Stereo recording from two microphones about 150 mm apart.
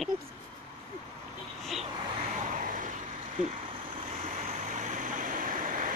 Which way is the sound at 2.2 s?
50° right (ahead or behind).